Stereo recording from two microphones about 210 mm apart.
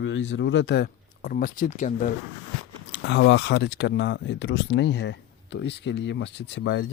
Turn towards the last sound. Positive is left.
turn(degrees=60)  # may be behind; listen again after turning